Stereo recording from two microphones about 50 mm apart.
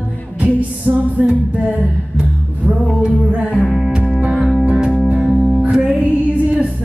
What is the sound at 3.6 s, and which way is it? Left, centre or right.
Music, centre.